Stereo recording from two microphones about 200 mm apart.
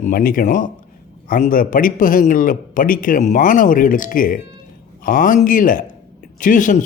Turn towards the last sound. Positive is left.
turn(degrees=40)  # may be behind; listen again after turning